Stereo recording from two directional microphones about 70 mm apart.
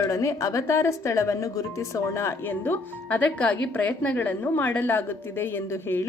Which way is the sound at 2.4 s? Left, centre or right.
Left.